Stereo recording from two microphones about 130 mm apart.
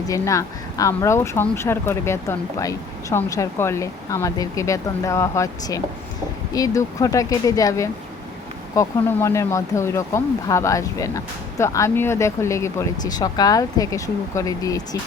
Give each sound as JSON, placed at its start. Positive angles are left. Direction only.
{"t": 0.1, "sound": "speech", "side_deg": 25}